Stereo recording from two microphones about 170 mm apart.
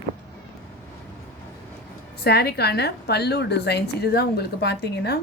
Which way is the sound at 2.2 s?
75° left (ahead or behind).